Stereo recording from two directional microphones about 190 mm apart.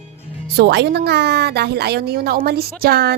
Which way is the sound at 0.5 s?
65° right (ahead or behind).